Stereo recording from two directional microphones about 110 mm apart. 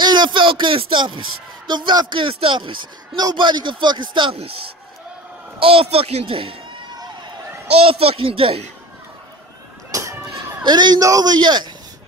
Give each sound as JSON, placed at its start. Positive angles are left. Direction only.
{"t": 0.0, "sound": "speech", "side_deg": -45}
{"t": 5.6, "sound": "speech", "side_deg": -55}
{"t": 7.7, "sound": "speech", "side_deg": -60}
{"t": 9.8, "sound": "a sound", "side_deg": -30}
{"t": 10.6, "sound": "a man's voice", "side_deg": -40}